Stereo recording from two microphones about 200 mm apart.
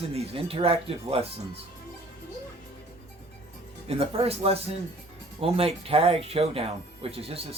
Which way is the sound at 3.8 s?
30° right (ahead or behind).